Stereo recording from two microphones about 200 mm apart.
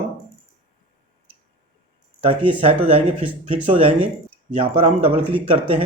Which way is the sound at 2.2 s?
30° right (ahead or behind).